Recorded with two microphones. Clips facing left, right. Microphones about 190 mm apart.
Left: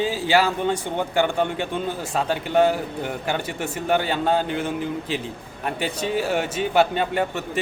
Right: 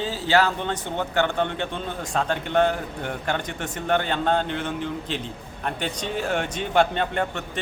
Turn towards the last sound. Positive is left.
turn(degrees=5)  # may be behind; listen again after turning